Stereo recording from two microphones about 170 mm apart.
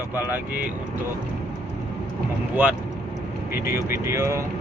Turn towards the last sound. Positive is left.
turn(degrees=-15)  # may be behind; listen again after turning